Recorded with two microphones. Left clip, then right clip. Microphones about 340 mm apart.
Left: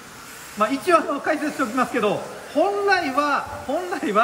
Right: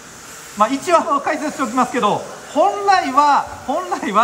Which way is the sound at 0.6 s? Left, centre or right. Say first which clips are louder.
Right 4 dB; centre.